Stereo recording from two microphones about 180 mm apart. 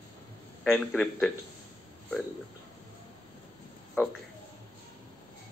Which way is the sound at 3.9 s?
Centre (ahead or behind).